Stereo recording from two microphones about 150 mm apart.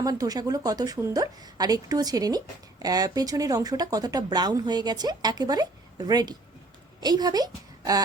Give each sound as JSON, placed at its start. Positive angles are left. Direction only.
{"t": 0.0, "sound": "a woman's voice", "side_deg": -25}